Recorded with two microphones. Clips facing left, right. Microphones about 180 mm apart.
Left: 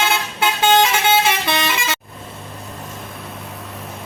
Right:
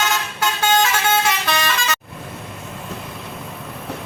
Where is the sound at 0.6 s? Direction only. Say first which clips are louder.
Left 3 dB; 25° left (ahead or behind).